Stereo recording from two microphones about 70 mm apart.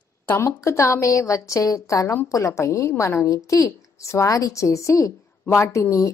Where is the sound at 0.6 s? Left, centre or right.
Left.